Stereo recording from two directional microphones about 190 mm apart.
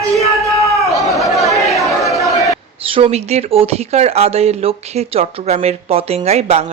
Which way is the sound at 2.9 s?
30° right (ahead or behind).